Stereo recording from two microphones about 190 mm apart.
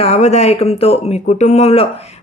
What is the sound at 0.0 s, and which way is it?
Speech, 35° left (ahead or behind).